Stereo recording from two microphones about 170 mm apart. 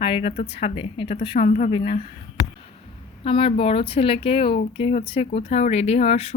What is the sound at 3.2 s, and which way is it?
Speech, 35° left (ahead or behind).